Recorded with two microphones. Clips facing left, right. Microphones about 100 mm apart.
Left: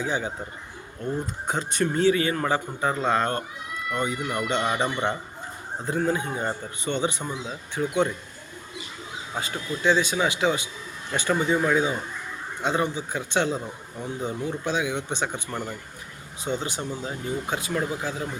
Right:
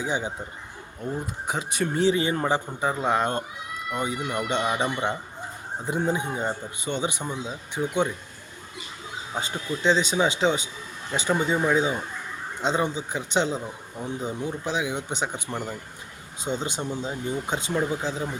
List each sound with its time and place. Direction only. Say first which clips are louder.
0.0 s speech: even; 20° right (ahead or behind)
1.5 s speech: left 2 dB; 5° right (ahead or behind)
2.0 s a man's voice: even; 20° right (ahead or behind)
9.3 s a man's voice: right 1 dB; 25° right (ahead or behind)